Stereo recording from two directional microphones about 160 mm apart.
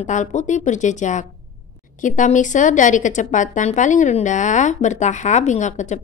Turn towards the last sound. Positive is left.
turn(degrees=50)  # may be behind; listen again after turning